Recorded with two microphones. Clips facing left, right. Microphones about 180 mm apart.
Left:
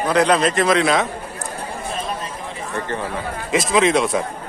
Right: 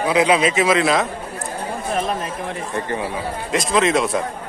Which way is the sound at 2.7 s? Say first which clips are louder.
Right 1 dB; 15° right (ahead or behind).